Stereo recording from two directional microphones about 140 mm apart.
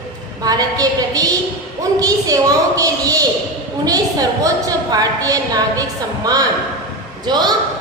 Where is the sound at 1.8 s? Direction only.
25° right (ahead or behind).